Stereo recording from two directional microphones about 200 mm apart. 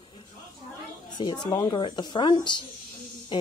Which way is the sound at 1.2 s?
20° left (ahead or behind).